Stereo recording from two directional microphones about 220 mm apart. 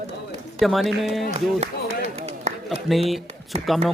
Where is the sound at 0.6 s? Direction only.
Centre (ahead or behind).